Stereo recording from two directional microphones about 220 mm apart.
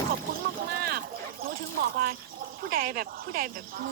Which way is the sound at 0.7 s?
45° right (ahead or behind).